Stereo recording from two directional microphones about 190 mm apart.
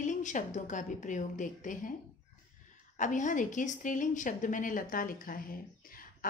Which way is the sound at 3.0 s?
40° left (ahead or behind).